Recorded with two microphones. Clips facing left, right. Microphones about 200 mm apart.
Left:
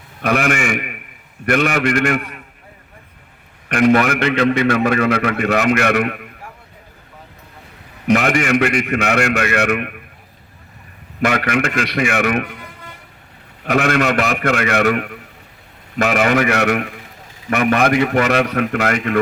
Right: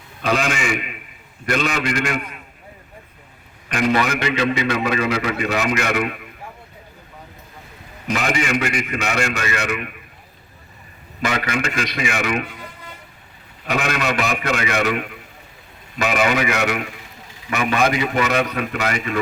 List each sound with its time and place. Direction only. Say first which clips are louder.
0.2 s a man's voice: left 3 dB; 60° left (ahead or behind)
3.7 s a man's voice: left 6 dB; 55° left (ahead or behind)
8.0 s a man's voice: left 6 dB; 60° left (ahead or behind)
11.2 s a man's voice: left 5 dB; 60° left (ahead or behind)
13.7 s a man's voice: left 6 dB; 55° left (ahead or behind)